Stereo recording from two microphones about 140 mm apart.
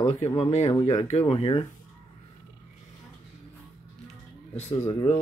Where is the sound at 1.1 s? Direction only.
45° left (ahead or behind).